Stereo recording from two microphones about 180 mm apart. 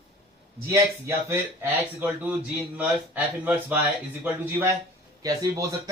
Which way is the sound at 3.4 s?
10° right (ahead or behind).